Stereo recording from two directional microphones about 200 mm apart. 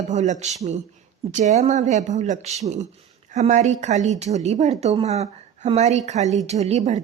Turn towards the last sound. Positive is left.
turn(degrees=-35)  # may be behind; listen again after turning